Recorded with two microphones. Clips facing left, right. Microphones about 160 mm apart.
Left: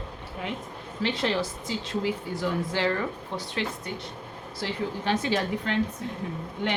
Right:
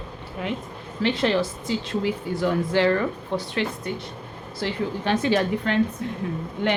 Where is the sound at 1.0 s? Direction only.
60° right (ahead or behind).